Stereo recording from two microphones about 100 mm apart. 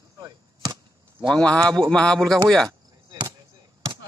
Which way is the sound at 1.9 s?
10° left (ahead or behind).